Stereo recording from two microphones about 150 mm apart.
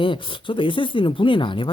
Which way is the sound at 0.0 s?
35° left (ahead or behind).